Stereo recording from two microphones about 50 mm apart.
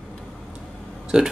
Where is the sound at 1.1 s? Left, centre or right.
Centre.